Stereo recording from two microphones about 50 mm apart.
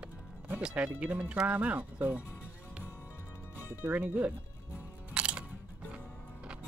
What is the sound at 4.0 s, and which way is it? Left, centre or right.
Speech, right.